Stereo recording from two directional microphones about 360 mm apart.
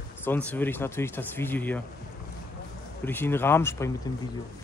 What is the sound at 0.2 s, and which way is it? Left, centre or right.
Speech, centre.